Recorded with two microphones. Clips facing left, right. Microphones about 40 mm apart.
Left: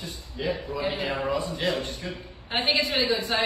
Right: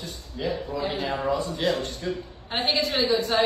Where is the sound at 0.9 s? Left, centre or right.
Left.